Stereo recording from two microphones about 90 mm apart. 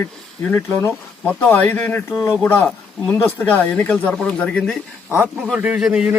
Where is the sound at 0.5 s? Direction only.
30° left (ahead or behind).